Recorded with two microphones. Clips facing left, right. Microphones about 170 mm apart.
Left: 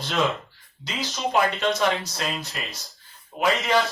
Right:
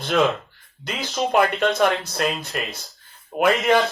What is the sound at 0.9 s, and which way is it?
Speech, 55° right (ahead or behind).